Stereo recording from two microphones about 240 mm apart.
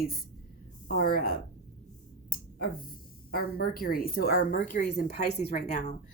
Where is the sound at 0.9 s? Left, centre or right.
Left.